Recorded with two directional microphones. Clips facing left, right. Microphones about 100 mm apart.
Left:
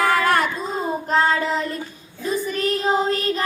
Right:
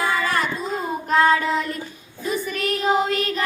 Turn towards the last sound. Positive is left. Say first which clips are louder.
# left 1 dB
turn(degrees=35)  # may be behind; listen again after turning